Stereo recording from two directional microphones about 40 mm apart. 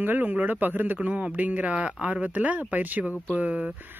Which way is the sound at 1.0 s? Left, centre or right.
Right.